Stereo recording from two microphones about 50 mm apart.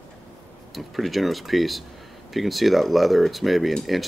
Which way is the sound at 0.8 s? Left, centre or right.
Centre.